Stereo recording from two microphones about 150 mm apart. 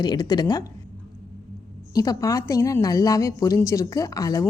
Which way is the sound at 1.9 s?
25° left (ahead or behind).